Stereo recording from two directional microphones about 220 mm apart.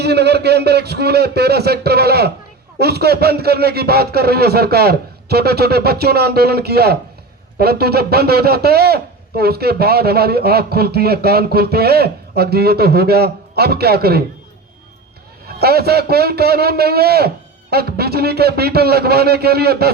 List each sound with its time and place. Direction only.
0.0 s a man's voice: 50° right (ahead or behind)
15.5 s a man's voice: 45° right (ahead or behind)